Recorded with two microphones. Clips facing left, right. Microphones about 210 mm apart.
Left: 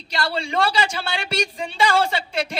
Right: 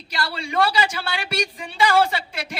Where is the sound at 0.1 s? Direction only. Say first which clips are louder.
Left 3 dB; 25° left (ahead or behind).